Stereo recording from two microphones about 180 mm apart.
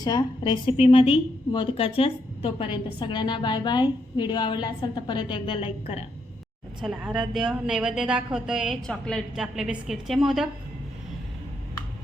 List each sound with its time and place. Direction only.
0.0 s a woman's voice: 25° left (ahead or behind)
6.8 s a woman's voice: 5° right (ahead or behind)